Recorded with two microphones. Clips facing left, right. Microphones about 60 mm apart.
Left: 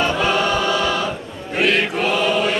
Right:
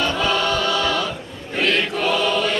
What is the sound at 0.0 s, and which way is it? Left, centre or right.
Choir, centre.